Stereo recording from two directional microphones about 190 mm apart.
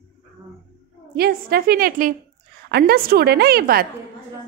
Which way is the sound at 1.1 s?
55° right (ahead or behind).